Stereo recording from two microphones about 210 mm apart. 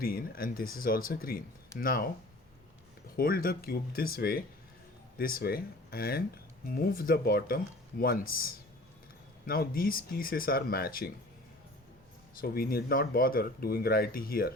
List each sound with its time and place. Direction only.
0.0 s speech: 45° left (ahead or behind)
3.2 s speech: 45° left (ahead or behind)
12.4 s speech: 45° left (ahead or behind)